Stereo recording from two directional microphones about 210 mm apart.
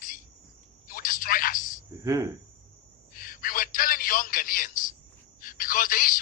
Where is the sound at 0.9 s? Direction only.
40° left (ahead or behind).